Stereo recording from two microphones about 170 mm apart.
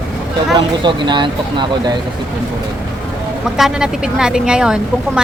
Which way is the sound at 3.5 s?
5° right (ahead or behind).